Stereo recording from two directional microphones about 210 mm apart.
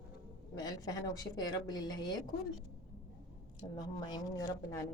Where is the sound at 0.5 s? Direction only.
20° left (ahead or behind).